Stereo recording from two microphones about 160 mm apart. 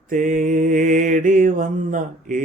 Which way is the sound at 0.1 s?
55° right (ahead or behind).